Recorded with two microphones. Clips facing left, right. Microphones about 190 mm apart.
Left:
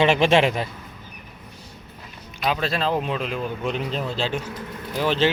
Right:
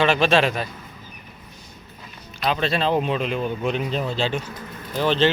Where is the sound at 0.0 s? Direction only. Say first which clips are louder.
Left 1 dB; 20° left (ahead or behind).